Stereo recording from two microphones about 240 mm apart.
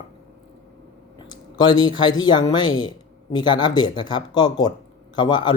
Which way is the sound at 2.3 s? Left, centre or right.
Centre.